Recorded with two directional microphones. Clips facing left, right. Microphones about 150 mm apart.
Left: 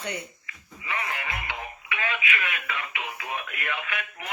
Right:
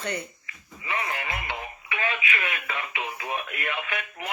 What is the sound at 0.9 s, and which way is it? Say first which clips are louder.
Radio: right 2 dB; 35° right (ahead or behind).